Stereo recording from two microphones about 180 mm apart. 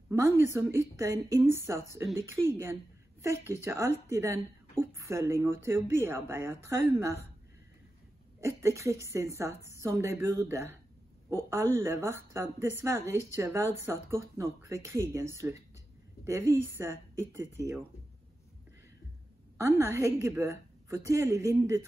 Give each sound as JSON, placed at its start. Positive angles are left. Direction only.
{"t": 0.1, "sound": "a woman's voice", "side_deg": -15}
{"t": 8.4, "sound": "speech", "side_deg": -15}
{"t": 19.6, "sound": "speech", "side_deg": -15}